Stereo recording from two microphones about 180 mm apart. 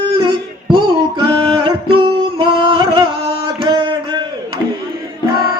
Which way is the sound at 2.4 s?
30° right (ahead or behind).